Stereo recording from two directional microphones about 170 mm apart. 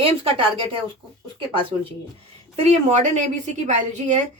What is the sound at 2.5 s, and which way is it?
A woman's voice, 40° right (ahead or behind).